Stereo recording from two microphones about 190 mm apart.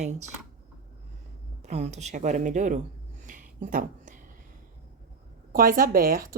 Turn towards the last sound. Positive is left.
turn(degrees=-50)  # may be behind; listen again after turning